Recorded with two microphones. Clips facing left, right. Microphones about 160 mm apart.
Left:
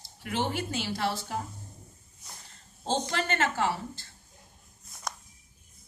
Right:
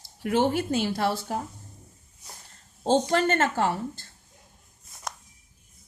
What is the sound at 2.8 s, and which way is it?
A woman's voice, 45° right (ahead or behind).